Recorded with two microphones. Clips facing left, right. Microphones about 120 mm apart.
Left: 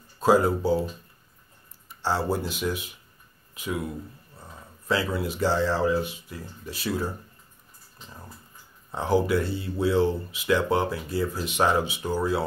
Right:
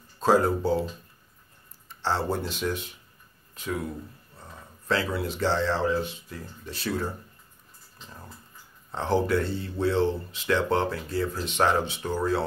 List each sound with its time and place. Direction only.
0.2 s speech: 10° left (ahead or behind)
1.9 s speech: 10° left (ahead or behind)
4.4 s a sound: 5° left (ahead or behind)
5.2 s speech: 10° left (ahead or behind)
8.9 s speech: 10° left (ahead or behind)